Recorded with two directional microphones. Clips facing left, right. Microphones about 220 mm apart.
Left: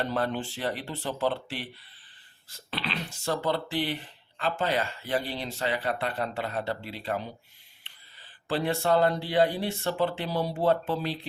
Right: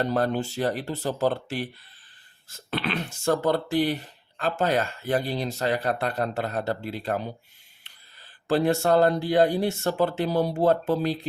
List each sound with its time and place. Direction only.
0.0 s speech: 40° right (ahead or behind)